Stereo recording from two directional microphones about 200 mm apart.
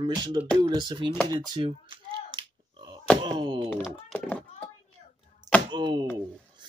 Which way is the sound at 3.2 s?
25° right (ahead or behind).